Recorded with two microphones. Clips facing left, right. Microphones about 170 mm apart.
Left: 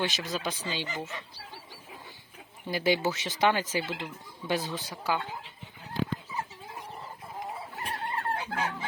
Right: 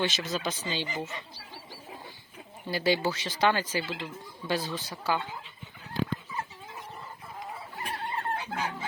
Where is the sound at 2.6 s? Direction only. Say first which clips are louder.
Even; 15° left (ahead or behind).